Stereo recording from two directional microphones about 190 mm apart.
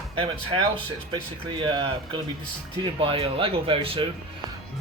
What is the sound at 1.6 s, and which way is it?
Speech, 25° right (ahead or behind).